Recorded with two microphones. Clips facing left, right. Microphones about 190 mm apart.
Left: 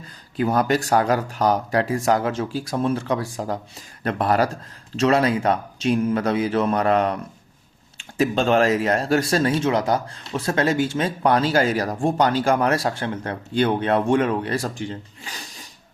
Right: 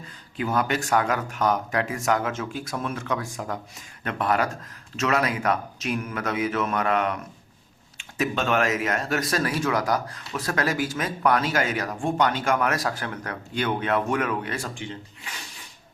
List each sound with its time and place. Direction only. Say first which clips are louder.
0.3 s speech: left 5 dB; 40° left (ahead or behind)